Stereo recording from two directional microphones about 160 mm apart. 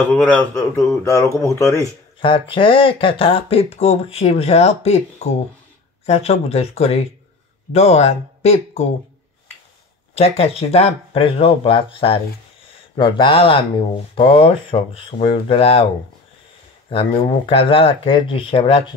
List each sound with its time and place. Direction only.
0.1 s speech: 10° left (ahead or behind)
1.0 s speech: 20° left (ahead or behind)
2.1 s speech: 35° left (ahead or behind)
10.1 s speech: 40° left (ahead or behind)
16.9 s speech: 35° left (ahead or behind)